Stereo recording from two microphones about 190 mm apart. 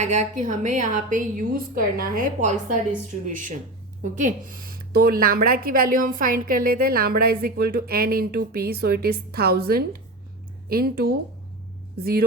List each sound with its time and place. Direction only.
0.0 s a woman's voice: 40° right (ahead or behind)